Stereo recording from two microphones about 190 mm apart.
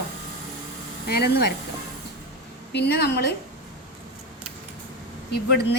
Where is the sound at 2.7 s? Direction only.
60° left (ahead or behind).